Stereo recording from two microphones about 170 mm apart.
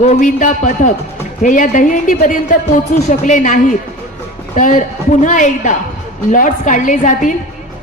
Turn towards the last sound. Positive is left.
turn(degrees=45)  # may be behind; listen again after turning